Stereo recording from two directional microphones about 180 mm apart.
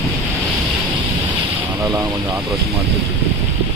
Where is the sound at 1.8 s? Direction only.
15° right (ahead or behind).